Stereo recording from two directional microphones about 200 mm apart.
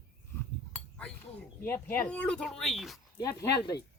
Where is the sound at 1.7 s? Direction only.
10° left (ahead or behind).